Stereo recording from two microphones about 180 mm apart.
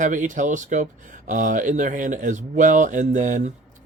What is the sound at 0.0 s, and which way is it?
Speech, 45° right (ahead or behind).